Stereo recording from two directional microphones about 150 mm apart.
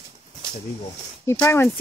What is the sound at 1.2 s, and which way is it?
Speech, 20° left (ahead or behind).